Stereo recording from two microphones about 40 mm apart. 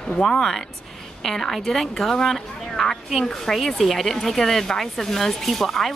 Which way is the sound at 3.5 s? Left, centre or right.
Centre.